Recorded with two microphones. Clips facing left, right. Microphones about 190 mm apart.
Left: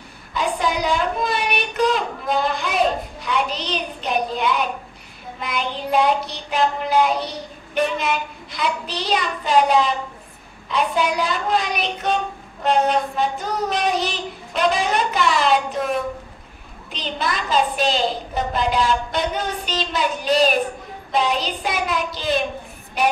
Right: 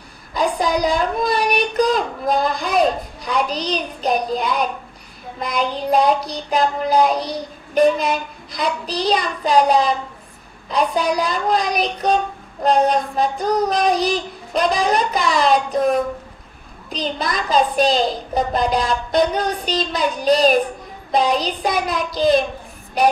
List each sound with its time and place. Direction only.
0.3 s a woman's voice: 40° right (ahead or behind)